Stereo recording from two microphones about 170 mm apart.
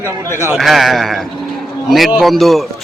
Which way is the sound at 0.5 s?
Centre (ahead or behind).